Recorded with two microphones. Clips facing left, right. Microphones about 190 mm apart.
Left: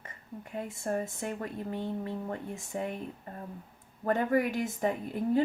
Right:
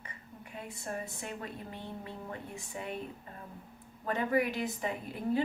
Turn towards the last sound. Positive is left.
turn(degrees=50)  # may be behind; listen again after turning